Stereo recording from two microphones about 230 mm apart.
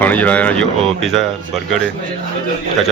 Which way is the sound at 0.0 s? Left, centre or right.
Centre.